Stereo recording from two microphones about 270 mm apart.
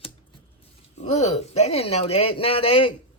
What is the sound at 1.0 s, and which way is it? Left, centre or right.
Speech, left.